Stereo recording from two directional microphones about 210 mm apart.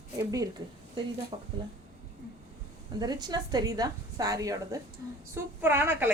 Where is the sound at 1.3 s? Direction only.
30° right (ahead or behind).